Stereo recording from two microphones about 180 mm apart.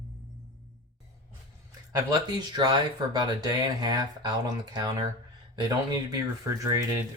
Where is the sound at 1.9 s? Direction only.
25° right (ahead or behind).